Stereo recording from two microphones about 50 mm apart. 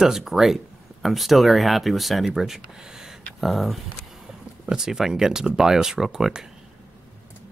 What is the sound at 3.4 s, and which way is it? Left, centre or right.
Speech, centre.